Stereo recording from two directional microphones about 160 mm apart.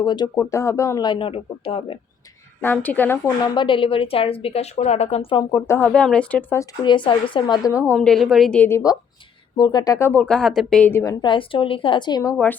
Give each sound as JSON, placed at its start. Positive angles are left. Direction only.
{"t": 0.0, "sound": "a woman's voice", "side_deg": 30}
{"t": 2.6, "sound": "speech", "side_deg": 10}
{"t": 3.2, "sound": "speech", "side_deg": 25}
{"t": 5.5, "sound": "speech", "side_deg": 15}
{"t": 6.8, "sound": "a woman's voice", "side_deg": 30}
{"t": 7.9, "sound": "a woman's voice", "side_deg": 5}
{"t": 10.1, "sound": "a woman's voice", "side_deg": 5}